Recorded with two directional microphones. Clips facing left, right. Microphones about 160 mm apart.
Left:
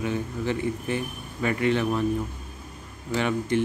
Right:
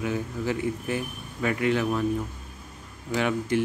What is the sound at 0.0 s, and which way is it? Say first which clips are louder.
Speech: left 1 dB; 5° right (ahead or behind).